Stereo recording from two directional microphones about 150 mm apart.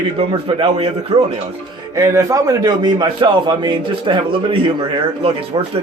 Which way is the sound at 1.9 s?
20° right (ahead or behind).